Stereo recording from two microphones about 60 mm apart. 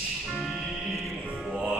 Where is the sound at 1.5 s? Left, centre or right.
Centre.